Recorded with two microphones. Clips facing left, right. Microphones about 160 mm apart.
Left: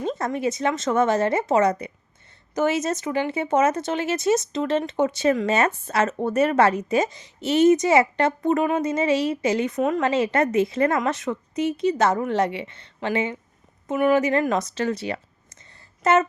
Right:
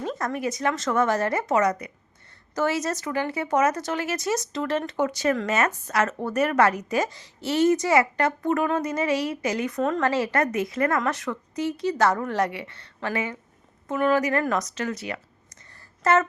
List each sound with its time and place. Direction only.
0.0 s a woman's voice: 25° left (ahead or behind)